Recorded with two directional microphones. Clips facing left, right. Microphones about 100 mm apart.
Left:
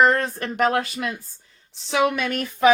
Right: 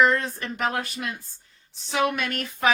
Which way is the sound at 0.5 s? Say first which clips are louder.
Left 7 dB; 60° left (ahead or behind).